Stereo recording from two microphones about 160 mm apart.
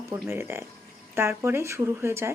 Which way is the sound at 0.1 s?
15° right (ahead or behind).